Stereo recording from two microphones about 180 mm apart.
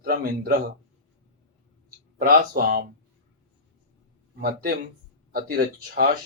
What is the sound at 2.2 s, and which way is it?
Speech, 55° right (ahead or behind).